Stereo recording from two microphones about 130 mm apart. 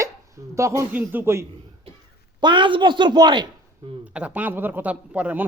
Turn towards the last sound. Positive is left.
turn(degrees=-10)  # may be behind; listen again after turning